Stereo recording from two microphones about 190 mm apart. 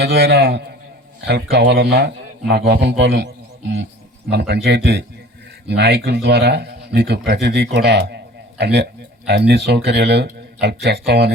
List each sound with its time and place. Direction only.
0.0 s a man's voice: 60° right (ahead or behind)